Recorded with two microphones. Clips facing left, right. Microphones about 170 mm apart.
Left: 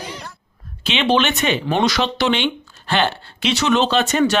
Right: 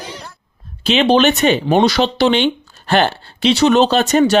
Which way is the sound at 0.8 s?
35° right (ahead or behind).